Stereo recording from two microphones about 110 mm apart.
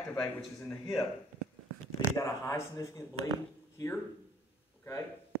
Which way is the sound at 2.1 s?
30° left (ahead or behind).